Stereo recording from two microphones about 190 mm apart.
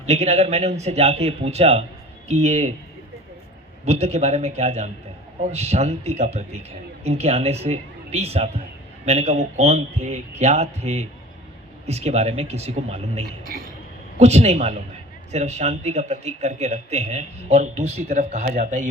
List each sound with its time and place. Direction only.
0.0 s a man's voice: 35° right (ahead or behind)
3.8 s a man's voice: 35° right (ahead or behind)
13.5 s a sound: 50° right (ahead or behind)
14.2 s a man's voice: 35° right (ahead or behind)